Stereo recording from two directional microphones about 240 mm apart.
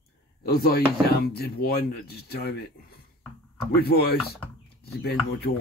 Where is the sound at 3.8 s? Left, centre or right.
Left.